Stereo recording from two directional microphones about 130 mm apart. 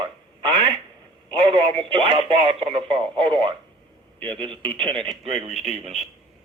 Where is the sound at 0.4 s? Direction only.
40° right (ahead or behind).